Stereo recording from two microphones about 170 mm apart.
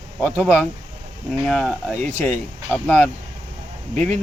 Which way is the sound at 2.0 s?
45° right (ahead or behind).